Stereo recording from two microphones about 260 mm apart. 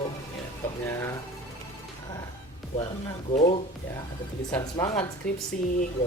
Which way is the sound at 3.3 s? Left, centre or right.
Left.